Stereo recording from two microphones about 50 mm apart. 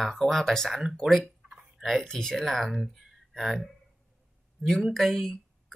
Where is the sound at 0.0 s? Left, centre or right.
Centre.